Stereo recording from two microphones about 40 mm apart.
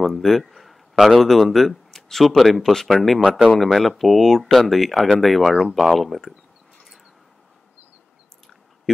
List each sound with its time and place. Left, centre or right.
0.0 s a sound: centre
0.9 s a man's voice: centre
1.2 s speech: centre
3.2 s speech: right
3.5 s speech: centre
8.9 s a sound: centre